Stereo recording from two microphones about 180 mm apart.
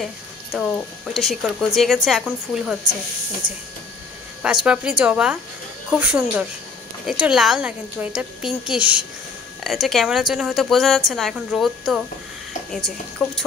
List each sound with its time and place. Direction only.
0.0 s a woman's voice: centre (ahead or behind)
4.4 s a woman's voice: 5° right (ahead or behind)
13.2 s a woman's voice: 5° left (ahead or behind)